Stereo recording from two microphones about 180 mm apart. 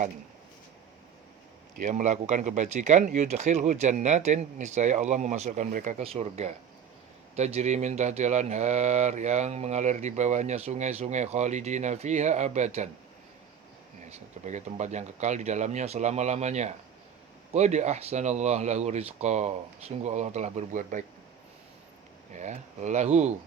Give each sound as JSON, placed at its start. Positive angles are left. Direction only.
{"t": 1.8, "sound": "speech", "side_deg": -45}
{"t": 14.4, "sound": "speech", "side_deg": -40}
{"t": 22.3, "sound": "speech", "side_deg": -40}